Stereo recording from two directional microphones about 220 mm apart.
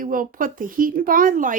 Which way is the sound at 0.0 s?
40° right (ahead or behind).